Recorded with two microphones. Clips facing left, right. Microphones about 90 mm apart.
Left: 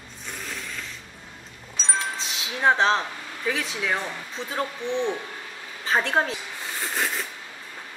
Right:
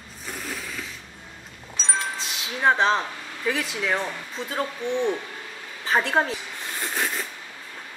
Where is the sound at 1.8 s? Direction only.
Centre (ahead or behind).